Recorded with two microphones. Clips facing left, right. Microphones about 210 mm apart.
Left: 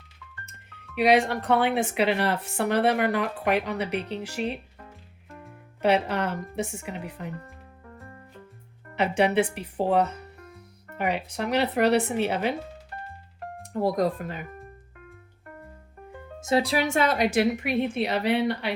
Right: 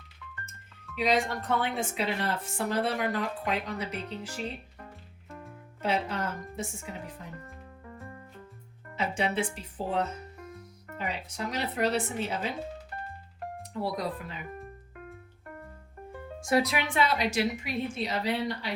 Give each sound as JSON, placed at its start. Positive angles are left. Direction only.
{"t": 0.4, "sound": "speech", "side_deg": 65}
{"t": 5.3, "sound": "music", "side_deg": 0}
{"t": 5.8, "sound": "speech", "side_deg": 65}
{"t": 9.0, "sound": "a woman's voice", "side_deg": 65}
{"t": 13.6, "sound": "speech", "side_deg": 45}
{"t": 16.4, "sound": "a woman's voice", "side_deg": 25}